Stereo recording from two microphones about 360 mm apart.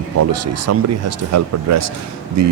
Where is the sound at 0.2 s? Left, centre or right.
Right.